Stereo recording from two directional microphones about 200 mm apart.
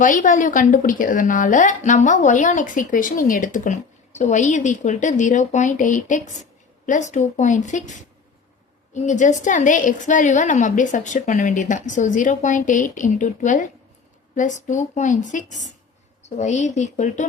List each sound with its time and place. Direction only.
0.0 s a woman's voice: 40° left (ahead or behind)